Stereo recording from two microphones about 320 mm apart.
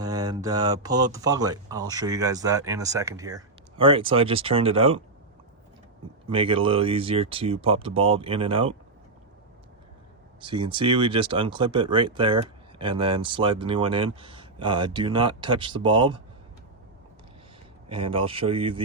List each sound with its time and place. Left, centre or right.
0.0 s speech: centre
6.2 s speech: centre
10.4 s speech: centre
18.1 s speech: centre